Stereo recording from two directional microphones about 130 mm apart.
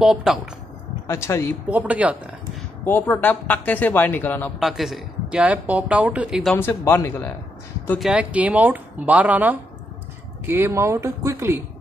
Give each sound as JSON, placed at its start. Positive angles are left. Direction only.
{"t": 0.0, "sound": "speech", "side_deg": -5}
{"t": 1.0, "sound": "speech", "side_deg": 20}
{"t": 1.7, "sound": "speech", "side_deg": -10}
{"t": 2.8, "sound": "speech", "side_deg": 15}
{"t": 4.6, "sound": "speech", "side_deg": 0}
{"t": 6.5, "sound": "speech", "side_deg": 15}
{"t": 8.0, "sound": "speech", "side_deg": -5}